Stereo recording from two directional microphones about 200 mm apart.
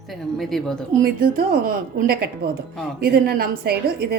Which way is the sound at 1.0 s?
45° right (ahead or behind).